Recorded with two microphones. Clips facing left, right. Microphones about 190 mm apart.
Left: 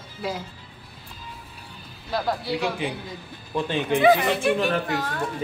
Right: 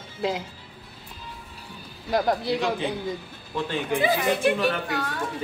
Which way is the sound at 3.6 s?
20° left (ahead or behind).